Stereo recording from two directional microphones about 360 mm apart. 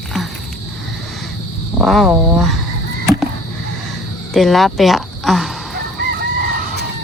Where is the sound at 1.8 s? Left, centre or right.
Centre.